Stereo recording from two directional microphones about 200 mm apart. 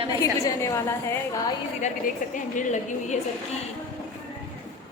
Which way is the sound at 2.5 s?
40° left (ahead or behind).